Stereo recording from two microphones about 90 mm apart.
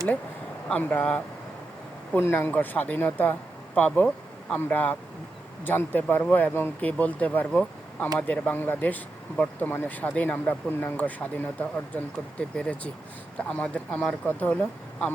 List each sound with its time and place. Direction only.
0.7 s speech: 20° left (ahead or behind)
2.1 s speech: 25° left (ahead or behind)